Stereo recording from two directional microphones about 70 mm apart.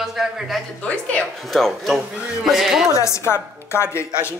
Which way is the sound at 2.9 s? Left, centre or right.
Left.